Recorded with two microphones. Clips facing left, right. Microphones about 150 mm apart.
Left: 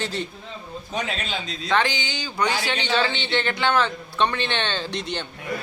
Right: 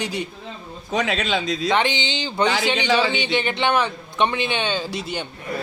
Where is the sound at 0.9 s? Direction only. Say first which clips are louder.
Right 7 dB; 90° right.